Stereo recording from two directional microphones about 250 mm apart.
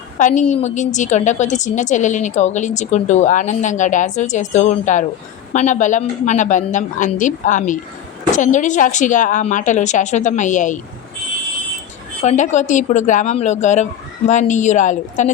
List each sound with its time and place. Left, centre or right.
0.2 s a woman's voice: left
12.2 s a woman's voice: left